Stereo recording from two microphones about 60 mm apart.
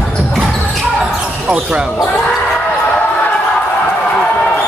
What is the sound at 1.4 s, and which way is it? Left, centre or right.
Speech, right.